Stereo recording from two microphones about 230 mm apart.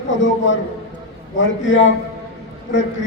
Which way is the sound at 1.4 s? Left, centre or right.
Left.